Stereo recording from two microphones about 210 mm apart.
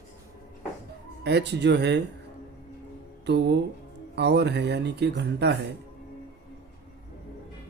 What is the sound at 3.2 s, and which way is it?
Music, 55° right (ahead or behind).